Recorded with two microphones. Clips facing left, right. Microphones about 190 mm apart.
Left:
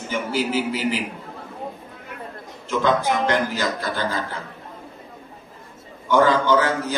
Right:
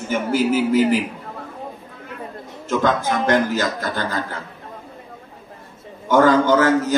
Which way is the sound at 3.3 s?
45° right (ahead or behind).